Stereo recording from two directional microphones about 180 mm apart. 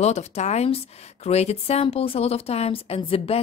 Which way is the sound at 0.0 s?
40° left (ahead or behind).